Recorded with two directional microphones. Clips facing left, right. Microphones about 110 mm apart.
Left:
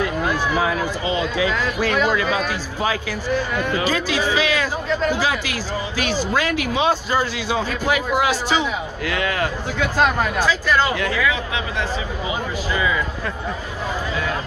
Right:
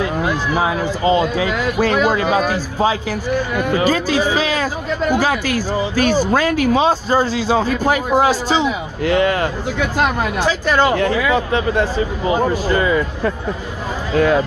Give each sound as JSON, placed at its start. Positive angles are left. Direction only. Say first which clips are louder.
{"t": 0.2, "sound": "a sound", "louder": "right 2 dB", "side_deg": -25}
{"t": 1.0, "sound": "a man's voice", "louder": "right 7 dB", "side_deg": -40}
{"t": 3.8, "sound": "speech", "louder": "right 5 dB", "side_deg": -40}
{"t": 10.8, "sound": "speech", "louder": "right 5 dB", "side_deg": -35}
{"t": 14.1, "sound": "speech", "louder": "right 15 dB", "side_deg": -60}